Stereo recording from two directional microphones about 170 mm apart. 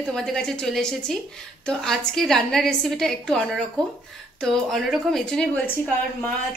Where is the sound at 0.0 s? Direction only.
5° left (ahead or behind).